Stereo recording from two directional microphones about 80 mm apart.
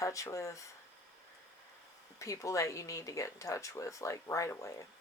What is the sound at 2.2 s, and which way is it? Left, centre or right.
Speech, left.